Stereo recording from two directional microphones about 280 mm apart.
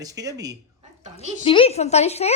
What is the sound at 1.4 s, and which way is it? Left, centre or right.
Speech, centre.